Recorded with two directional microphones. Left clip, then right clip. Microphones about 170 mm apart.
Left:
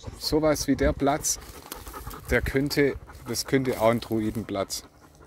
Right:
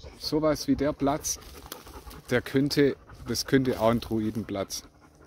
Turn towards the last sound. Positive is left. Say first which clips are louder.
# left 3 dB
turn(degrees=-20)  # may be behind; listen again after turning